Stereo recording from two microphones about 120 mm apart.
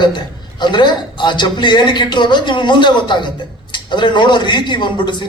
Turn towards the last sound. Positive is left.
turn(degrees=40)  # may be behind; listen again after turning